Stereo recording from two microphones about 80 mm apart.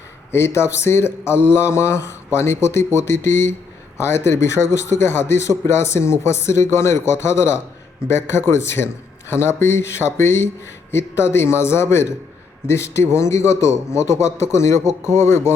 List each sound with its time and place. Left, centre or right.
0.3 s a man's voice: left